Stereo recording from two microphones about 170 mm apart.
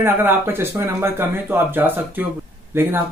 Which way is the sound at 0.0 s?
15° right (ahead or behind).